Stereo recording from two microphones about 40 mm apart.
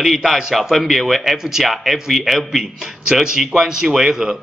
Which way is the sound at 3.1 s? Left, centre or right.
Centre.